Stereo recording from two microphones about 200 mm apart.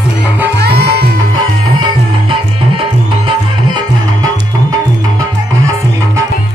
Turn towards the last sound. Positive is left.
turn(degrees=-20)  # may be behind; listen again after turning